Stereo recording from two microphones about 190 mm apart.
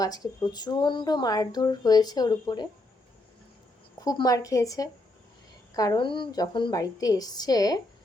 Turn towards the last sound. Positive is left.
turn(degrees=20)  # may be behind; listen again after turning